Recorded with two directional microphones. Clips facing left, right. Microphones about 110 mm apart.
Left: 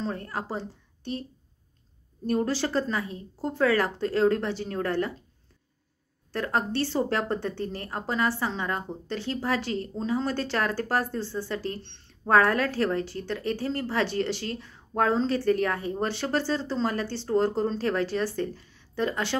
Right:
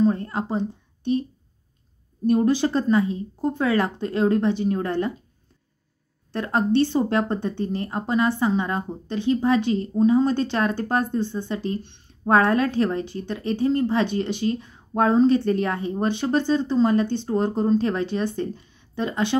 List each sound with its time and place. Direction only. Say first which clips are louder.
0.1 s speech: right 7 dB; 25° right (ahead or behind)
2.2 s a woman's voice: right 7 dB; 20° right (ahead or behind)
6.3 s a woman's voice: right 6 dB; 20° right (ahead or behind)